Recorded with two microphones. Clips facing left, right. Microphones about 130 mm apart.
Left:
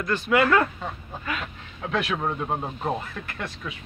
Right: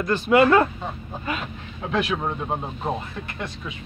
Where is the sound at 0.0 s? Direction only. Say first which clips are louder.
Right 4 dB; 30° right (ahead or behind).